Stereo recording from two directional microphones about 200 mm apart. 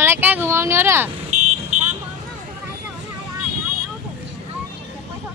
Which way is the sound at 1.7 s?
35° right (ahead or behind).